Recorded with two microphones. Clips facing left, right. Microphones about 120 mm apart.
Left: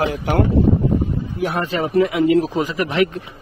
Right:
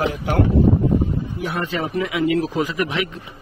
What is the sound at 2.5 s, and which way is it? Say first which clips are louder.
Speech: left 1 dB; 30° left (ahead or behind).